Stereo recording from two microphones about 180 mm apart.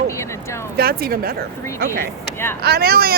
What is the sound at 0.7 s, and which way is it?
Speech, 55° right (ahead or behind).